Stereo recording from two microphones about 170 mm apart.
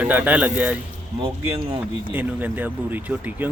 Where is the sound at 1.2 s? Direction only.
30° right (ahead or behind).